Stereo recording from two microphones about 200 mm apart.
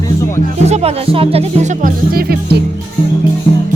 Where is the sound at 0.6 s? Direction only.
30° right (ahead or behind); by 2.6 s 50° right (ahead or behind).